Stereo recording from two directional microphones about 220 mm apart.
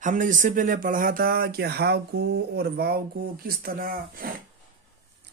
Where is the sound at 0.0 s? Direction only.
35° right (ahead or behind).